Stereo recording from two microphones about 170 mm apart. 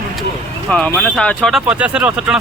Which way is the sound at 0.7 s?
5° left (ahead or behind).